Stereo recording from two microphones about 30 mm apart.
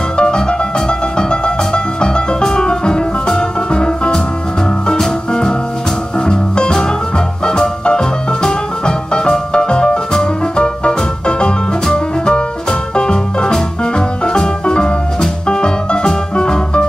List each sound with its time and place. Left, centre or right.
0.2 s music: left
5.3 s music: left